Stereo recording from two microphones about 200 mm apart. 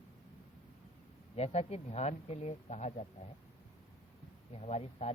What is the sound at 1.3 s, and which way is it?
Speech, 30° left (ahead or behind).